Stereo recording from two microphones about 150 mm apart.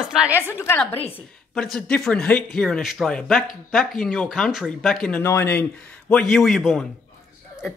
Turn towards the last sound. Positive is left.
turn(degrees=0)  # may be behind; listen again after turning